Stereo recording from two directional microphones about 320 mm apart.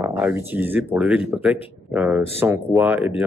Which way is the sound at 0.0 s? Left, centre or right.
Centre.